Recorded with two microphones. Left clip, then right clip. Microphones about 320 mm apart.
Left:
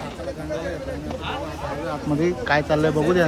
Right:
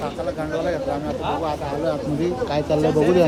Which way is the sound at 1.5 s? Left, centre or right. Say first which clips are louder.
Right 5 dB; centre.